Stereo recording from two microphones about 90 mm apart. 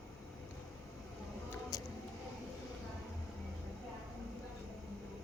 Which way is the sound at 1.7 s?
45° left (ahead or behind).